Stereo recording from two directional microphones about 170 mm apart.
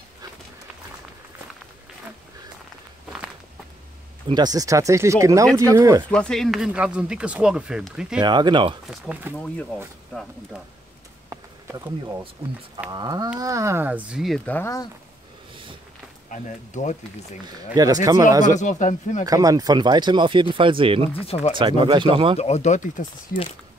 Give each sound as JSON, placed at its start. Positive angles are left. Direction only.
{"t": 4.3, "sound": "speech", "side_deg": -25}
{"t": 6.0, "sound": "speech", "side_deg": 5}
{"t": 8.2, "sound": "speech", "side_deg": -25}
{"t": 8.8, "sound": "speech", "side_deg": 0}
{"t": 11.2, "sound": "a sound", "side_deg": -20}
{"t": 12.9, "sound": "speech", "side_deg": -25}
{"t": 16.3, "sound": "speech", "side_deg": 45}
{"t": 17.8, "sound": "speech", "side_deg": -25}
{"t": 18.4, "sound": "speech", "side_deg": 45}
{"t": 19.2, "sound": "speech", "side_deg": -20}
{"t": 21.3, "sound": "speech", "side_deg": 40}
{"t": 21.5, "sound": "speech", "side_deg": -30}
{"t": 22.4, "sound": "speech", "side_deg": 40}